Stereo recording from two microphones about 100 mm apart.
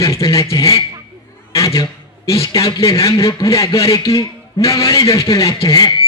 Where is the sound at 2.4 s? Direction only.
30° left (ahead or behind).